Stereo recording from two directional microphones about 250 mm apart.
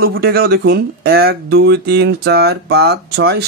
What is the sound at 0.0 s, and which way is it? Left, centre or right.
A man's voice, right.